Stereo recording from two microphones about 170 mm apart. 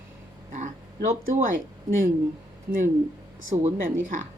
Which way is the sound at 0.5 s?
45° right (ahead or behind).